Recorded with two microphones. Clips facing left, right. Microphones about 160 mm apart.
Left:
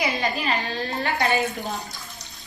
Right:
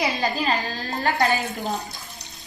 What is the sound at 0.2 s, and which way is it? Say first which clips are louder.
A woman's voice: right 2 dB; 40° right (ahead or behind).